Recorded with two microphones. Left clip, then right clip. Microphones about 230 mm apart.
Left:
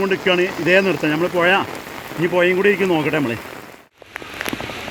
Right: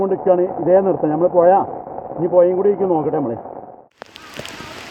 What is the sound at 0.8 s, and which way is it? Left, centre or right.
Speech, left.